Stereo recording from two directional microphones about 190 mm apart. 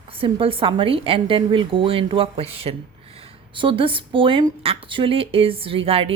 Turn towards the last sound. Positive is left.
turn(degrees=-30)  # may be behind; listen again after turning